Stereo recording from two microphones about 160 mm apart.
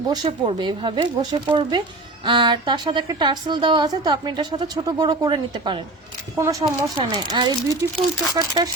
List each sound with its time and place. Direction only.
0.1 s a woman's voice: 30° right (ahead or behind)